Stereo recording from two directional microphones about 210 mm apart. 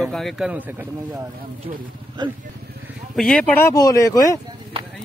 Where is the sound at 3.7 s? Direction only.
15° left (ahead or behind).